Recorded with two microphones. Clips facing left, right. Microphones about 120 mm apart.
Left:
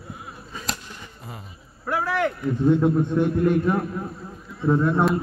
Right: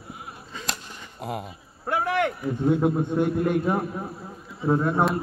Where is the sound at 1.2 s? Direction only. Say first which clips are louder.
Right 13 dB; 70° right (ahead or behind).